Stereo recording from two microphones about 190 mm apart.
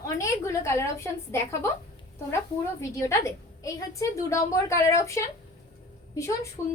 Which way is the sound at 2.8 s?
15° left (ahead or behind).